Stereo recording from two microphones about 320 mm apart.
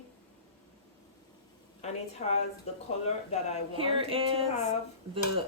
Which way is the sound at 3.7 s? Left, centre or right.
Centre.